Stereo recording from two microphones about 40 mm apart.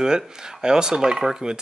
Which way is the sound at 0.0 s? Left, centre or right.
Centre.